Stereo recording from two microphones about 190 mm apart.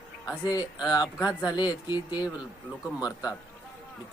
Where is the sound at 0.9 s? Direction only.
20° left (ahead or behind).